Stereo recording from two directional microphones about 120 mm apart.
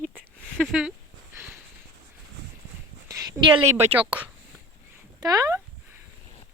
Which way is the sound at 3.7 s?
60° right (ahead or behind).